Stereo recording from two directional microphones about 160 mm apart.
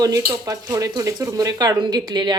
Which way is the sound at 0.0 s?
25° right (ahead or behind).